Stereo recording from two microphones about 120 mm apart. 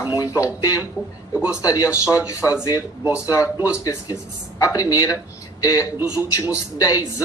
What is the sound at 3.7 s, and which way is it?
Speech, 30° left (ahead or behind).